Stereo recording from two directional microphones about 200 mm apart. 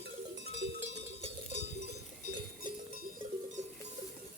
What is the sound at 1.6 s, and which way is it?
Cowbell, 55° right (ahead or behind).